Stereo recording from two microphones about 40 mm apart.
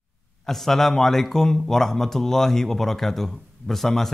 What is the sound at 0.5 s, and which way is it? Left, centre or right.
Speech, centre.